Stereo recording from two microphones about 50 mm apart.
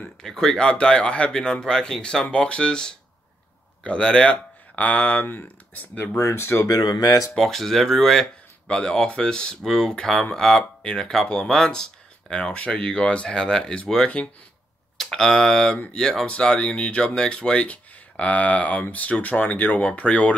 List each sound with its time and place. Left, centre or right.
0.2 s speech: centre; by 6.0 s left
6.1 s speech: left
7.3 s speech: centre
8.6 s speech: centre
15.0 s speech: centre; by 20.3 s left